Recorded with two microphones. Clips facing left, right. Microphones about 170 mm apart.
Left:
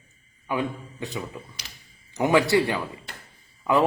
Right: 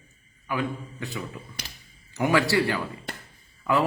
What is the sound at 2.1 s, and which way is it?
Speech, 20° left (ahead or behind).